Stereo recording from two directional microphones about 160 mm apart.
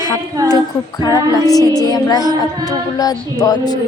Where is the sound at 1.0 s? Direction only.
20° left (ahead or behind).